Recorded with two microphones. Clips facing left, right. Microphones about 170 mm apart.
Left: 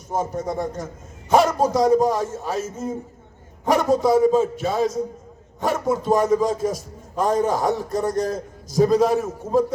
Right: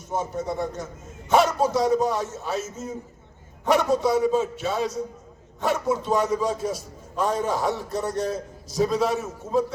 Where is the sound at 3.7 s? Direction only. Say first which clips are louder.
Left 3 dB; 45° left (ahead or behind).